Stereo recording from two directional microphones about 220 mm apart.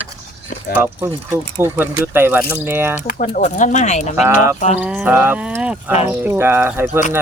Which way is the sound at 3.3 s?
35° left (ahead or behind).